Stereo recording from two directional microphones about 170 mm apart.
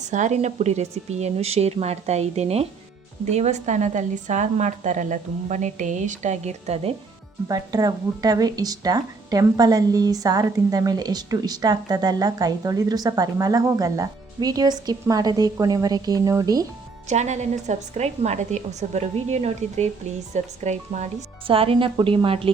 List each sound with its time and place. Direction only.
0.0 s a woman's voice: 45° right (ahead or behind)
7.4 s speech: 20° right (ahead or behind)
17.1 s a woman's voice: 40° right (ahead or behind)